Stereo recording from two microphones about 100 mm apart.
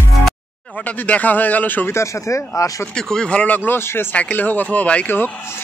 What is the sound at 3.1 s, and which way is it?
Speech, 10° left (ahead or behind).